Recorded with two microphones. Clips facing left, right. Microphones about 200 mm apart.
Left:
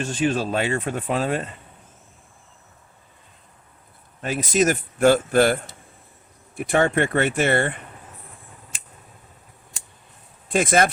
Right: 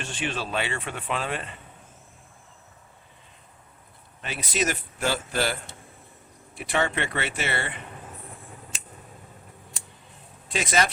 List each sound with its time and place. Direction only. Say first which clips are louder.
0.0 s speech: left 9 dB; 40° left (ahead or behind)
4.2 s speech: left 8 dB; 45° left (ahead or behind)
6.6 s speech: left 7 dB; 50° left (ahead or behind)
10.5 s speech: left 6 dB; 50° left (ahead or behind)